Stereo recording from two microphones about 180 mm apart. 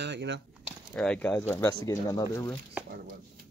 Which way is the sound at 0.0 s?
75° right (ahead or behind).